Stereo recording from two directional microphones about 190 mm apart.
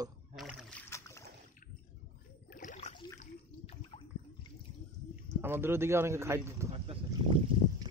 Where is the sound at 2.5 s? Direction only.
40° left (ahead or behind).